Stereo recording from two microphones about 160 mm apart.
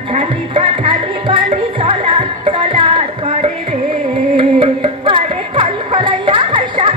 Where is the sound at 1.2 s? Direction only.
35° right (ahead or behind).